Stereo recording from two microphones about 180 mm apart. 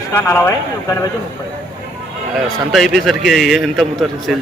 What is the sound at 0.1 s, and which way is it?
Speech, 10° left (ahead or behind).